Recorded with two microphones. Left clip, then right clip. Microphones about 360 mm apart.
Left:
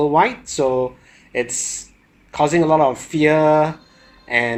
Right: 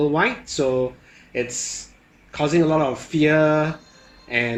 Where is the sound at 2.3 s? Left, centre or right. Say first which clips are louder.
Left 4 dB; left.